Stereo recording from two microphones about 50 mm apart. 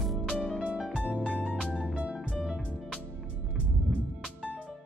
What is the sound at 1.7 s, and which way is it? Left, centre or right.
Music, centre.